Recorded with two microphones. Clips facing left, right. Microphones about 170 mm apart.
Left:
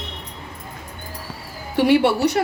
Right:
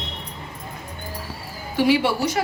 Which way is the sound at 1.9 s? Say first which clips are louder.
Left 4 dB; 65° left (ahead or behind).